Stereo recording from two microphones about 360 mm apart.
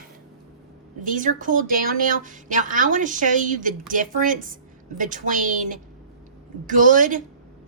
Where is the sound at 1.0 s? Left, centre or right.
Right.